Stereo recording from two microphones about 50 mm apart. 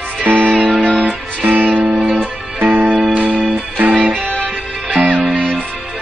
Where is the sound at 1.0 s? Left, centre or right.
Right.